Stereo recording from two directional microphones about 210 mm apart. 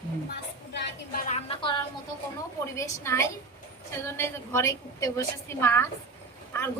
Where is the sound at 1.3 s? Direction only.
25° left (ahead or behind).